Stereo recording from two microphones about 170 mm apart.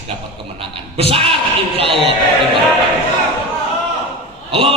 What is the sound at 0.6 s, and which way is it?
Speech, 35° right (ahead or behind).